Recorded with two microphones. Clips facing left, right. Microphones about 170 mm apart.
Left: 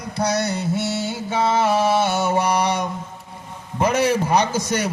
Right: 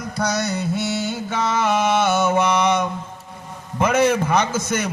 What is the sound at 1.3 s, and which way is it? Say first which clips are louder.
Mantra: left 2 dB; 30° left (ahead or behind).